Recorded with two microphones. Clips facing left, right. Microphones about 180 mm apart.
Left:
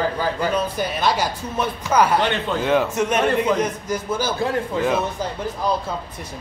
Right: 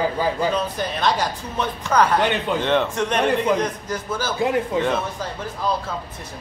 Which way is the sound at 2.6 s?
5° left (ahead or behind).